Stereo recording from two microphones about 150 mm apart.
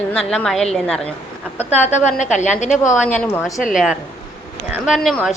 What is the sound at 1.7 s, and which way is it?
A woman's voice, 50° left (ahead or behind).